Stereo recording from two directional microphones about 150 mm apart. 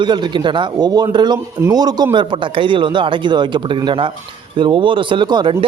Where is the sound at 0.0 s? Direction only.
30° right (ahead or behind).